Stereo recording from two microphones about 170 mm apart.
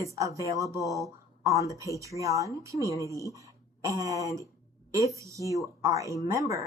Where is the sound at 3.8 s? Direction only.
20° right (ahead or behind).